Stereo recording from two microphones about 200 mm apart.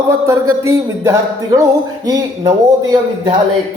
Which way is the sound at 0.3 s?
15° right (ahead or behind).